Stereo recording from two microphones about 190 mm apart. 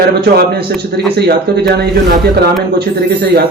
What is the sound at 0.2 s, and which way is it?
Speech, 55° right (ahead or behind).